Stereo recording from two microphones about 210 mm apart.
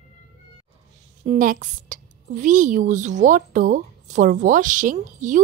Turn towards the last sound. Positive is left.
turn(degrees=-35)  # may be behind; listen again after turning